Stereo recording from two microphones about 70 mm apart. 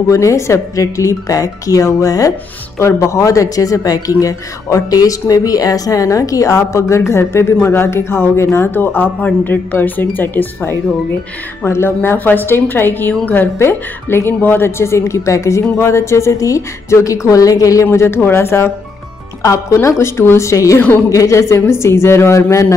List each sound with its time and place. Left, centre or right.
0.1 s a woman's voice: left
2.8 s a woman's voice: left
17.9 s a woman's voice: left